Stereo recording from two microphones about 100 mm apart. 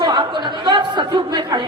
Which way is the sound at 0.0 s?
50° right (ahead or behind).